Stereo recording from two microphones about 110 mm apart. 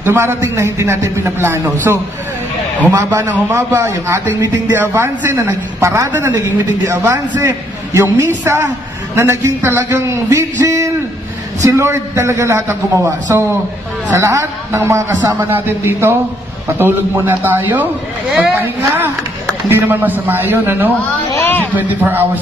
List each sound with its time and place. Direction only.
0.0 s a man's voice: 20° right (ahead or behind)
21.3 s speech: 20° left (ahead or behind)
21.7 s a man's voice: 15° right (ahead or behind)